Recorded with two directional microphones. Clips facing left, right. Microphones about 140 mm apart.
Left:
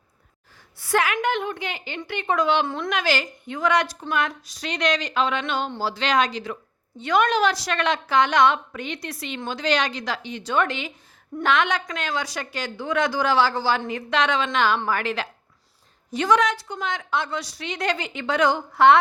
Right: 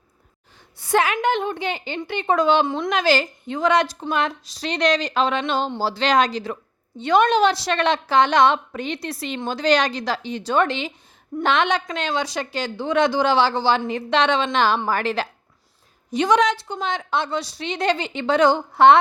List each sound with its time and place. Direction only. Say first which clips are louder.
0.8 s speech: right 3 dB; 25° right (ahead or behind)
16.1 s speech: right 2 dB; 20° right (ahead or behind)